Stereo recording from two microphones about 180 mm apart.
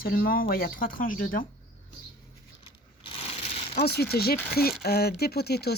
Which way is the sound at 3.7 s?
65° left (ahead or behind).